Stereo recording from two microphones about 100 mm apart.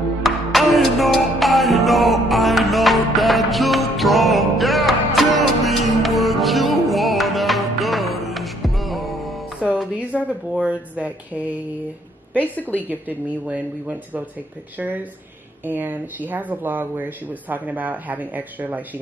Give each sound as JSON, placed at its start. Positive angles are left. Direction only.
{"t": 0.2, "sound": "music", "side_deg": 0}
{"t": 10.2, "sound": "speech", "side_deg": -10}
{"t": 12.4, "sound": "a woman's voice", "side_deg": 15}
{"t": 13.5, "sound": "speech", "side_deg": -15}
{"t": 15.6, "sound": "speech", "side_deg": -20}